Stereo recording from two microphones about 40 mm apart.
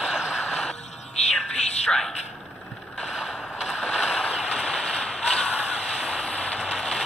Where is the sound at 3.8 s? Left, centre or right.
Centre.